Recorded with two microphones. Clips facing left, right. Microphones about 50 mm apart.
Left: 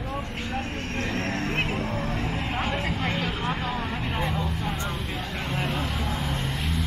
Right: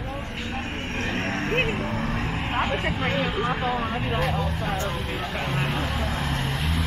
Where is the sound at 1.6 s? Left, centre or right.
Centre.